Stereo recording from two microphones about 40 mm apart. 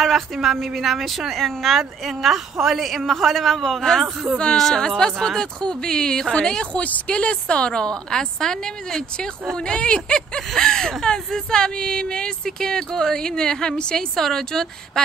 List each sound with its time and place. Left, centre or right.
0.0 s a woman's voice: centre; by 6.7 s left
6.7 s a woman's voice: left; by 14.7 s centre